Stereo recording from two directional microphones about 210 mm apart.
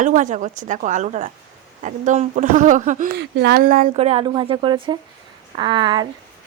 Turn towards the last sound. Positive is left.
turn(degrees=-20)  # may be behind; listen again after turning